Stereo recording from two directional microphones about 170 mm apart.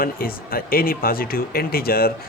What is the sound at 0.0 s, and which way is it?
Speech, 60° left (ahead or behind).